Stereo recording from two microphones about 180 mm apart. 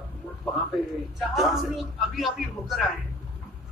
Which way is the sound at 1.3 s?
Centre (ahead or behind).